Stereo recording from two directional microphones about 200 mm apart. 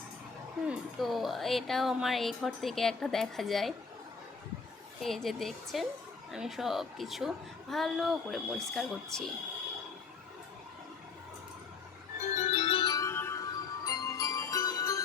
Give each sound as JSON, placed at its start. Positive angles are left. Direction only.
{"t": 0.7, "sound": "a woman's voice", "side_deg": 0}
{"t": 5.0, "sound": "a woman's voice", "side_deg": 0}
{"t": 12.2, "sound": "music", "side_deg": 35}